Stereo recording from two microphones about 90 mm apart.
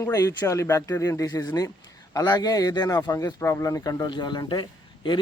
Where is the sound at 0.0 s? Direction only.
35° left (ahead or behind).